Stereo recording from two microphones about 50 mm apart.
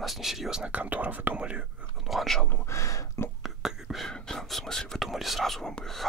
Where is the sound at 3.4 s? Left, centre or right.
Centre.